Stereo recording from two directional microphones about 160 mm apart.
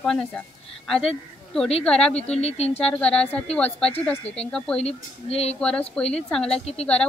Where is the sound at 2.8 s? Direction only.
5° left (ahead or behind).